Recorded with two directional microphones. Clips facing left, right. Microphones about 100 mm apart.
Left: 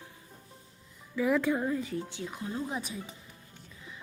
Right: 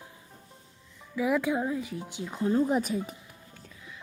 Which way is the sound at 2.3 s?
35° right (ahead or behind).